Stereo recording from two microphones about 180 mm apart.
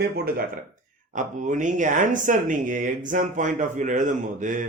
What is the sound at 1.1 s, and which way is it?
A man's voice, 45° right (ahead or behind).